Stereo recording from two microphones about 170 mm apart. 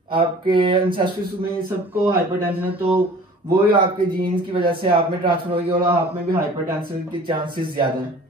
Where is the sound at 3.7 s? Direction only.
30° right (ahead or behind).